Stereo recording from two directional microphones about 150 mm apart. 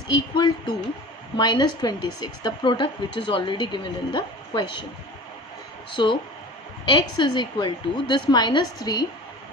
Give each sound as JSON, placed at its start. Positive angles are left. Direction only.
{"t": 0.1, "sound": "a woman's voice", "side_deg": 30}
{"t": 6.0, "sound": "a woman's voice", "side_deg": 30}